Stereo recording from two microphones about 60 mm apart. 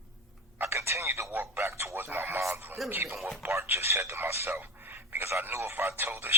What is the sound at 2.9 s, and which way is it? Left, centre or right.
A man's voice, right.